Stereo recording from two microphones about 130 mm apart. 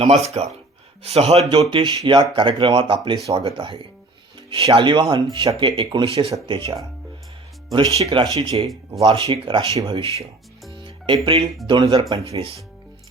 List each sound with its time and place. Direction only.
0.0 s speech: 55° right (ahead or behind); by 6.1 s 40° right (ahead or behind)
7.7 s speech: 40° right (ahead or behind)
10.8 s music: 40° right (ahead or behind)
11.6 s speech: 40° right (ahead or behind)
12.3 s speech: 50° right (ahead or behind)